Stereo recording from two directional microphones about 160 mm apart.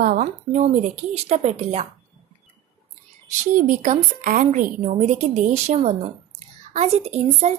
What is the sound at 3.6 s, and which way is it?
A woman's voice, 55° right (ahead or behind).